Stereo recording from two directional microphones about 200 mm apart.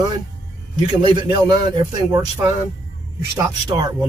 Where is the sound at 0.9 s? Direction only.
25° right (ahead or behind).